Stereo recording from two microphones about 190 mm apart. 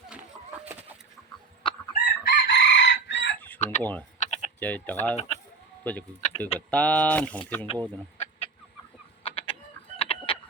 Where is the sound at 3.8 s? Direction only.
10° left (ahead or behind).